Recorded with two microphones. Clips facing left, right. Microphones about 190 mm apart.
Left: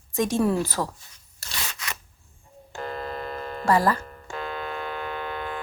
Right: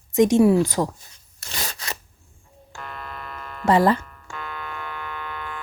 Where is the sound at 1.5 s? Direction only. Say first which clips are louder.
Right 3 dB; 35° right (ahead or behind).